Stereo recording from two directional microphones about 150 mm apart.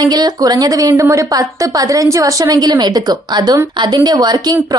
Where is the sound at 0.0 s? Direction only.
25° right (ahead or behind).